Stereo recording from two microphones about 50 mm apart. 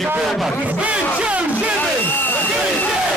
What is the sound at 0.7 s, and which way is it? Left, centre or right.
Battle cry, right.